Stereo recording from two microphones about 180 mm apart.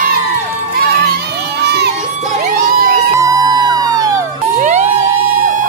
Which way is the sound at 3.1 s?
20° right (ahead or behind).